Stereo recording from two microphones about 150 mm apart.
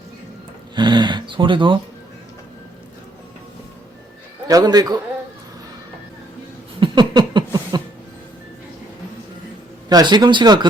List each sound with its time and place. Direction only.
0.8 s speech: 30° right (ahead or behind)
4.4 s speech: 25° right (ahead or behind)
6.7 s a sound: 30° right (ahead or behind)
9.9 s speech: 25° right (ahead or behind)